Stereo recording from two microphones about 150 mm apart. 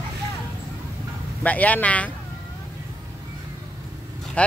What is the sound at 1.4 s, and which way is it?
Speech, 10° left (ahead or behind).